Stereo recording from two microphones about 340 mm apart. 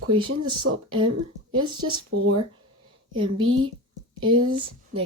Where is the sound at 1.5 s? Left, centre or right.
Centre.